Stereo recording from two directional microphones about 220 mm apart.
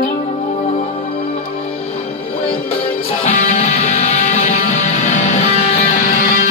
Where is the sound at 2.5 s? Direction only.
25° left (ahead or behind).